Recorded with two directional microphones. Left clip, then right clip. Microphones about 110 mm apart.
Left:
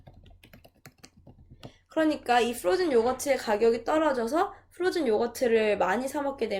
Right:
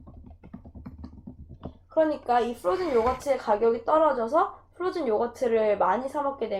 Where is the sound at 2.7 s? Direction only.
15° left (ahead or behind).